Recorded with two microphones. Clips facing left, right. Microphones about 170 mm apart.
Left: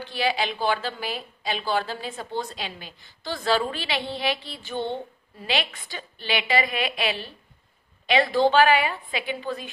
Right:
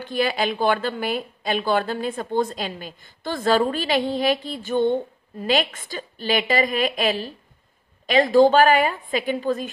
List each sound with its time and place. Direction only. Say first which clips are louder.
0.0 s a woman's voice: right 3 dB; 50° right (ahead or behind)